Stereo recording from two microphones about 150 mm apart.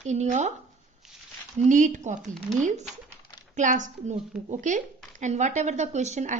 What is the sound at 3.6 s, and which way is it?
A woman's voice, 55° right (ahead or behind).